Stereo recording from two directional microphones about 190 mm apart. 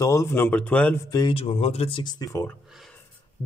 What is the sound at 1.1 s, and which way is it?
Speech, 25° left (ahead or behind).